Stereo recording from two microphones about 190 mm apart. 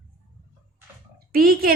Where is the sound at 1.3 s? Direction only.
50° right (ahead or behind).